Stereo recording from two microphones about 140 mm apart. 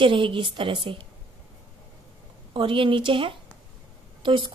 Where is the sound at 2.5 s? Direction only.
40° right (ahead or behind).